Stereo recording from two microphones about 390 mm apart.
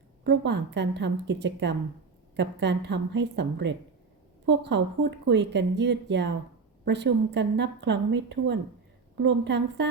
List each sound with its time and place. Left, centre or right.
0.3 s speech: right